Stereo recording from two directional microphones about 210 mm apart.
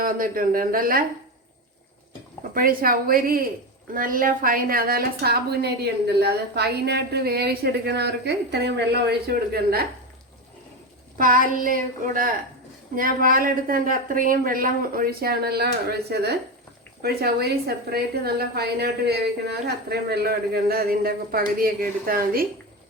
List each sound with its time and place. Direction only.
0.0 s a woman's voice: 40° right (ahead or behind)
2.4 s a woman's voice: 45° right (ahead or behind)
11.2 s child singing: 40° right (ahead or behind)
13.0 s a woman's voice: 40° right (ahead or behind)